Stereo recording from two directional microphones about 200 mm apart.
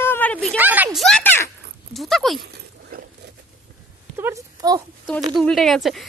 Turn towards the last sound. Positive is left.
turn(degrees=0)  # may be behind; listen again after turning